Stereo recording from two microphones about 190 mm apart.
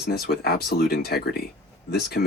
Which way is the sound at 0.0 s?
55° left (ahead or behind).